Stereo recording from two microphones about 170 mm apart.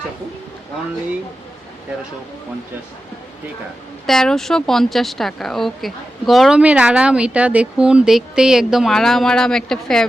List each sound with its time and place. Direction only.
4.0 s speech: 5° left (ahead or behind)